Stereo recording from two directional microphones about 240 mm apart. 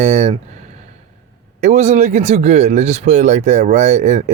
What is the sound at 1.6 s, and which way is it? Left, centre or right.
Speech, right.